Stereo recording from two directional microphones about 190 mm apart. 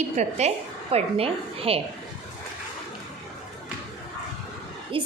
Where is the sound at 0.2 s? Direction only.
35° right (ahead or behind).